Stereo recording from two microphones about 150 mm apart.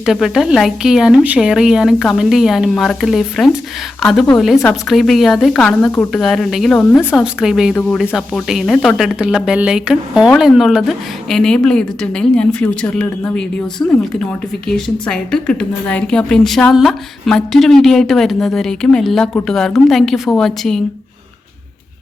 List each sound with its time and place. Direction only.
0.0 s a woman's voice: 5° right (ahead or behind)
7.8 s speech: 10° left (ahead or behind)
8.0 s a woman's voice: 5° right (ahead or behind)